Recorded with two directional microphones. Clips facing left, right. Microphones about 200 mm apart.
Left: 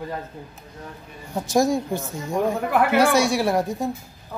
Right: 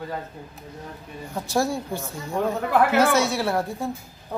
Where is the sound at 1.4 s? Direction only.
15° left (ahead or behind).